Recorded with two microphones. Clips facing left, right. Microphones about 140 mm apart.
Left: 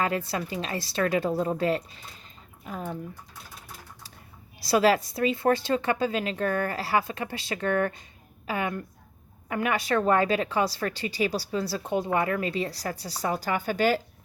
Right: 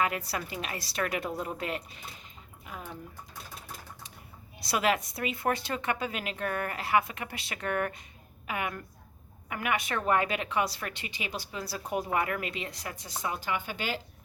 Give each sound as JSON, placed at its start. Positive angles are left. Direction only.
{"t": 0.0, "sound": "speech", "side_deg": 30}
{"t": 4.7, "sound": "speech", "side_deg": 30}